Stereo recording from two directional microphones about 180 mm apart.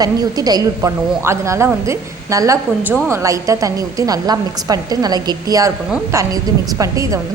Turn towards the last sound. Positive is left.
turn(degrees=-20)  # may be behind; listen again after turning